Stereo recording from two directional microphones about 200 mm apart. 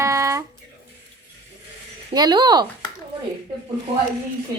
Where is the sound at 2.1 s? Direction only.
20° right (ahead or behind).